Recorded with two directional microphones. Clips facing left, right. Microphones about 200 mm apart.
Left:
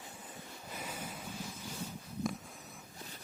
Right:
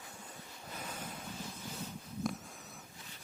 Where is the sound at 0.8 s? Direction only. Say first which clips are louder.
Left 1 dB; 10° left (ahead or behind).